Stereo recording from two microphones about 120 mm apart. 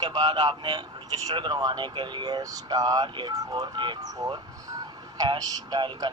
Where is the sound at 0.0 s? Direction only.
35° right (ahead or behind).